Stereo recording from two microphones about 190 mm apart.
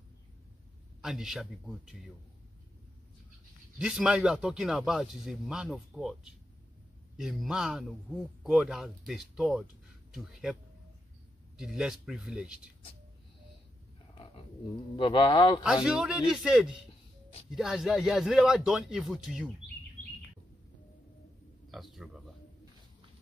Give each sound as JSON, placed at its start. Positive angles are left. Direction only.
{"t": 1.0, "sound": "speech", "side_deg": 0}
{"t": 3.7, "sound": "speech", "side_deg": -5}
{"t": 14.1, "sound": "a sound", "side_deg": 25}
{"t": 15.0, "sound": "speech", "side_deg": 25}
{"t": 15.6, "sound": "speech", "side_deg": -5}
{"t": 21.6, "sound": "a sound", "side_deg": 0}